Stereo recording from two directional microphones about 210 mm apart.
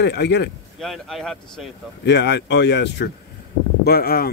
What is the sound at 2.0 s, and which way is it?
Speech, 55° left (ahead or behind).